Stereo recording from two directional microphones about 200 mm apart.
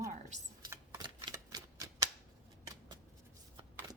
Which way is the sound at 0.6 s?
20° right (ahead or behind).